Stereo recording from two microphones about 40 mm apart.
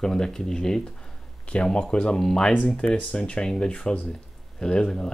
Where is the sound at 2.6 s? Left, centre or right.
Left.